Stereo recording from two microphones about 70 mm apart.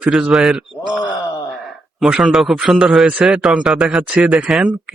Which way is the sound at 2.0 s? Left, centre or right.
Centre.